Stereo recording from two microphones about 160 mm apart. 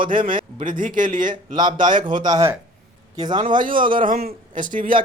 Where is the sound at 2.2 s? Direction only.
25° right (ahead or behind).